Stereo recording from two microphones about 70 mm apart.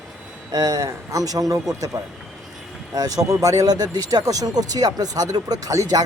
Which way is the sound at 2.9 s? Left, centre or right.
Right.